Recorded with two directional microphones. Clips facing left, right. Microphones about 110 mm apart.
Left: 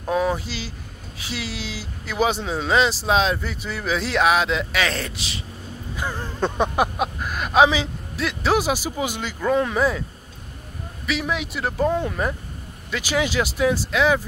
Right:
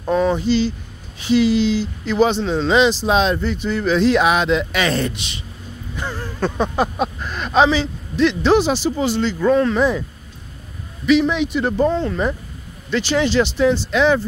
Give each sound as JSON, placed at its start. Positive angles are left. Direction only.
{"t": 0.1, "sound": "speech", "side_deg": 5}
{"t": 5.9, "sound": "a sound", "side_deg": 15}
{"t": 6.7, "sound": "speech", "side_deg": 10}
{"t": 11.1, "sound": "speech", "side_deg": 5}
{"t": 11.9, "sound": "speech", "side_deg": 15}